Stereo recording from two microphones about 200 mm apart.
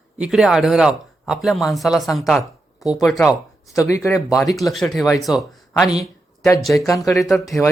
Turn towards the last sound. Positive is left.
turn(degrees=0)  # may be behind; listen again after turning